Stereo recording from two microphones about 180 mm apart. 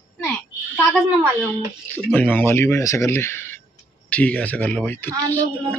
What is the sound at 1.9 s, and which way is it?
Speech, 10° left (ahead or behind).